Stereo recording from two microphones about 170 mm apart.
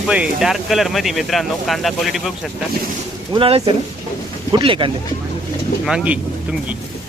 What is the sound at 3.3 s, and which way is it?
Speech, 35° right (ahead or behind).